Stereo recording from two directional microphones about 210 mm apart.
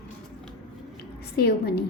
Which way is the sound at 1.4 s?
50° left (ahead or behind).